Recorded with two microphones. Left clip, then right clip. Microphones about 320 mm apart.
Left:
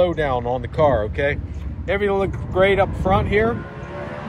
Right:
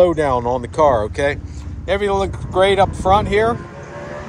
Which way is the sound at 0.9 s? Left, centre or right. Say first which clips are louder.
Right 3 dB; centre.